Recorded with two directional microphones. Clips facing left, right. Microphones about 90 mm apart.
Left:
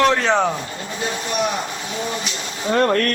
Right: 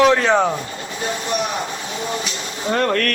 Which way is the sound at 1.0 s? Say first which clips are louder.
Even; 35° right (ahead or behind).